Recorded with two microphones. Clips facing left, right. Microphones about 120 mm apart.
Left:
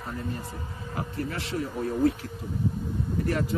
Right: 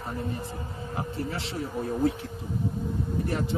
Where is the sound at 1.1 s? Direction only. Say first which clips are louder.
Left 1 dB; 30° right (ahead or behind).